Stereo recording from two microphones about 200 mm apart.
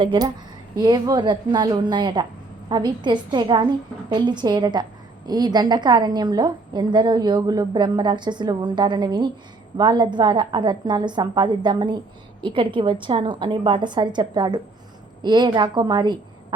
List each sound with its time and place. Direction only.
0.0 s a woman's voice: 20° right (ahead or behind)